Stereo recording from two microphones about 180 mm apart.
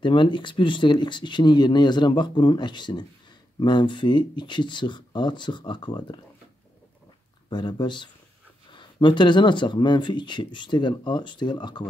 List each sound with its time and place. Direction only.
0.0 s speech: 25° left (ahead or behind)
7.4 s speech: 25° left (ahead or behind)